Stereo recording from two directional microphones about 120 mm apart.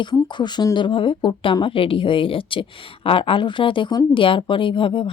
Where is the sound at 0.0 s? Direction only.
40° left (ahead or behind).